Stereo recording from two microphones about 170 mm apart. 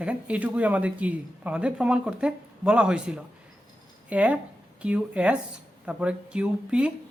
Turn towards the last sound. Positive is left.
turn(degrees=-5)  # may be behind; listen again after turning